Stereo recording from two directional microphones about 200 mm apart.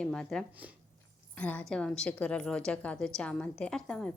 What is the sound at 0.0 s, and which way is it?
A woman's voice, 5° left (ahead or behind).